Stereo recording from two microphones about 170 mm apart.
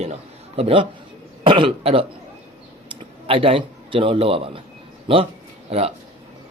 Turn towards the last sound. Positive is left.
turn(degrees=-35)  # may be behind; listen again after turning